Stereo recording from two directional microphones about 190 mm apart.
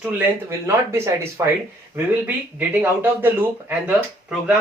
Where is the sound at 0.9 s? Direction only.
15° right (ahead or behind).